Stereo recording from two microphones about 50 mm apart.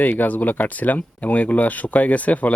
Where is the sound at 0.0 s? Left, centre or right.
Left.